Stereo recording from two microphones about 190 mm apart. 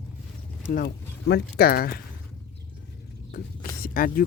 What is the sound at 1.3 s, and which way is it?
Speech, 55° left (ahead or behind).